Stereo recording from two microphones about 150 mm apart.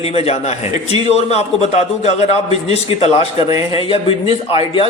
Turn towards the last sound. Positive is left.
turn(degrees=40)  # may be behind; listen again after turning